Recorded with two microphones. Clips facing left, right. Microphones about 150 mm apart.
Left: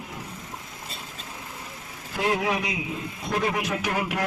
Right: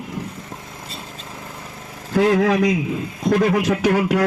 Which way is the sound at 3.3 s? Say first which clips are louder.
Right 9 dB; 50° right (ahead or behind).